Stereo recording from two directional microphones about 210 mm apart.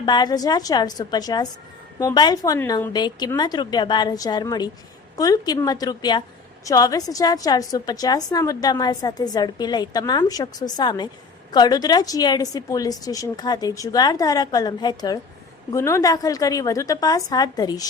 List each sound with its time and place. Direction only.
0.0 s a woman's voice: 20° left (ahead or behind)